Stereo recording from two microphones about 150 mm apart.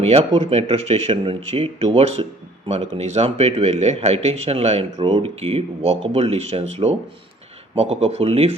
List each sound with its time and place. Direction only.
0.0 s speech: 40° right (ahead or behind)